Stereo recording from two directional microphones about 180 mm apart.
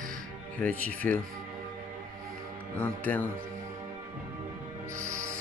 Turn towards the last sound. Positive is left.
turn(degrees=-15)  # may be behind; listen again after turning